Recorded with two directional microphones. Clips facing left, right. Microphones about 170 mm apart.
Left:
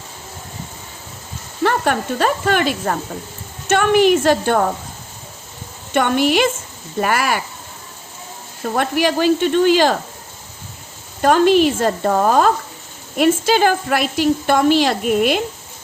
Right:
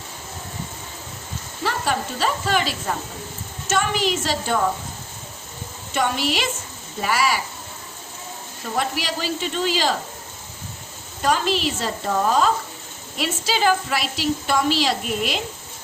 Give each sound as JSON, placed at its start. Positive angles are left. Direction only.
{"t": 1.6, "sound": "speech", "side_deg": 55}
{"t": 5.9, "sound": "speech", "side_deg": 55}
{"t": 8.6, "sound": "speech", "side_deg": 55}
{"t": 11.2, "sound": "a woman's voice", "side_deg": 50}